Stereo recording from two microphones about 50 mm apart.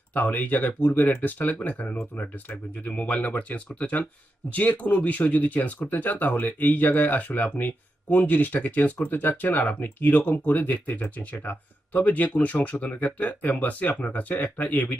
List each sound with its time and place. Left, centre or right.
0.1 s speech: left